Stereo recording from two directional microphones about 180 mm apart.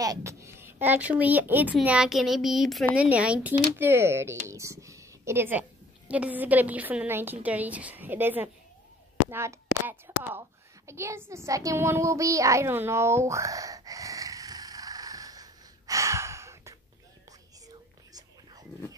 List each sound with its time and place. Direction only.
0.0 s speech: 20° right (ahead or behind)
9.3 s a sound: 15° right (ahead or behind)
10.9 s child singing: 15° right (ahead or behind)
17.6 s whispering: 20° right (ahead or behind)